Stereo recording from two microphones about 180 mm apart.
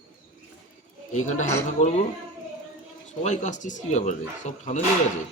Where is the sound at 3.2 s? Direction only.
40° left (ahead or behind).